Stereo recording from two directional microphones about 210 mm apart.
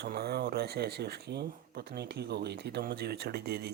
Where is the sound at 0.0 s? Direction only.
50° right (ahead or behind).